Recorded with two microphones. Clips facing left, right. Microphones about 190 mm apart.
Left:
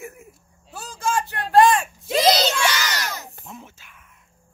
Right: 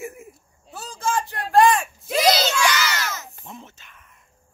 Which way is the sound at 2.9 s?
35° left (ahead or behind).